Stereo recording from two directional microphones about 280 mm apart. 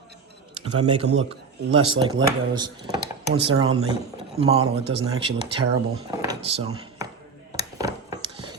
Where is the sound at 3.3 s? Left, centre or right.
Right.